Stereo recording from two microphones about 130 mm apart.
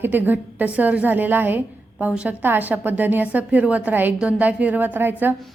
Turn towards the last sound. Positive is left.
turn(degrees=-15)  # may be behind; listen again after turning